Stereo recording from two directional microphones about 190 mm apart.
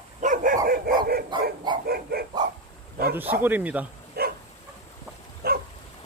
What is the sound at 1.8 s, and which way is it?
Dog, 55° right (ahead or behind).